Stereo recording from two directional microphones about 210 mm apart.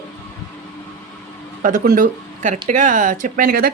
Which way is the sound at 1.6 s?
40° right (ahead or behind).